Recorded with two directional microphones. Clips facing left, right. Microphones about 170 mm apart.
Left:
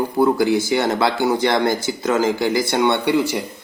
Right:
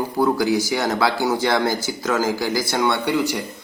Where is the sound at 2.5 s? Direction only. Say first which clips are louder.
Left 3 dB; 20° left (ahead or behind).